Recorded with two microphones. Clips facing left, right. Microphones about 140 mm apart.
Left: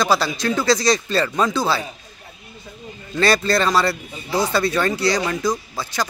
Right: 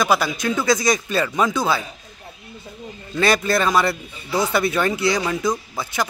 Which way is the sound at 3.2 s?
15° right (ahead or behind).